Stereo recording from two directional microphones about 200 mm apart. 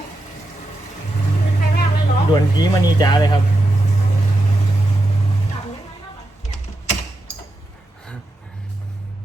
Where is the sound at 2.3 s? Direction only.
20° left (ahead or behind).